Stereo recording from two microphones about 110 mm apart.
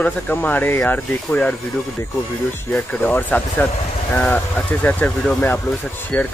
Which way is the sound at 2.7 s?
15° left (ahead or behind).